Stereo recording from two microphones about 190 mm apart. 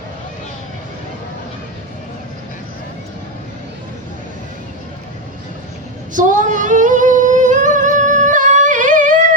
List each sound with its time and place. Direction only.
6.1 s singing: 40° right (ahead or behind)